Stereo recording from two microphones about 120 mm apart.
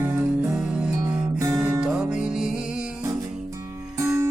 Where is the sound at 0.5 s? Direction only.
5° right (ahead or behind).